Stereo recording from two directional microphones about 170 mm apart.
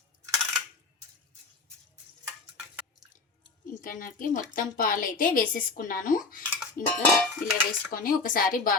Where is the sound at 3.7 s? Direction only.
55° left (ahead or behind).